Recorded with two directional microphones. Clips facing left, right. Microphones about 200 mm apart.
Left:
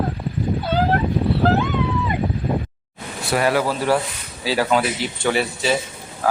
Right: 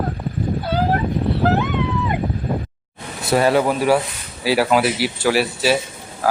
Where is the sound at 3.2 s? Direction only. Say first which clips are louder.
Right 3 dB; 25° right (ahead or behind).